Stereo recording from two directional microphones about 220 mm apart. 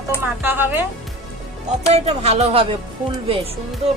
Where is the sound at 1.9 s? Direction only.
30° right (ahead or behind).